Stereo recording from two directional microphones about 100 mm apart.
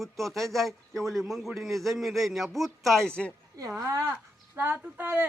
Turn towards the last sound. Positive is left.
turn(degrees=-20)  # may be behind; listen again after turning